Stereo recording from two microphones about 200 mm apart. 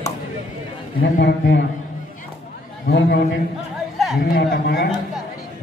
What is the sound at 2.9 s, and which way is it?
A man's voice, 55° left (ahead or behind).